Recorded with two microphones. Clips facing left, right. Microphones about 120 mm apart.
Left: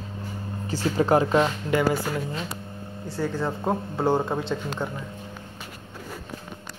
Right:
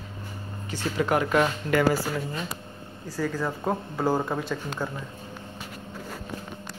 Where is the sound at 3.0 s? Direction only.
25° left (ahead or behind).